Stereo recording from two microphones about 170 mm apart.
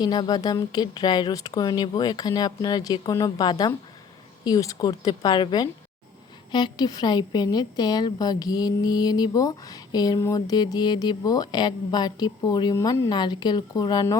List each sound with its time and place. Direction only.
0.0 s a woman's voice: 25° left (ahead or behind)